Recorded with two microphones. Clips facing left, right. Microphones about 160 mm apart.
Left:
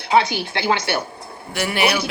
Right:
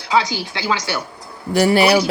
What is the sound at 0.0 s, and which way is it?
Speech, 60° left (ahead or behind).